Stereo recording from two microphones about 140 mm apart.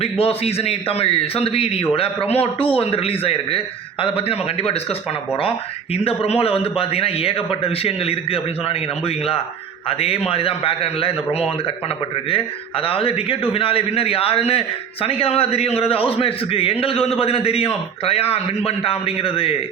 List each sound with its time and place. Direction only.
0.0 s a man's voice: 45° left (ahead or behind)